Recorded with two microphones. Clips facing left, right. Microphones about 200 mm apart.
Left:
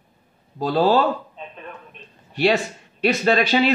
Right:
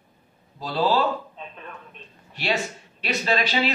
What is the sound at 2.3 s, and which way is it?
A man's voice, 45° left (ahead or behind).